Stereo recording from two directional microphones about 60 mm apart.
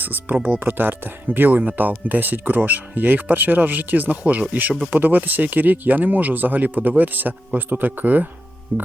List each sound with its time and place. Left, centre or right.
0.0 s speech: right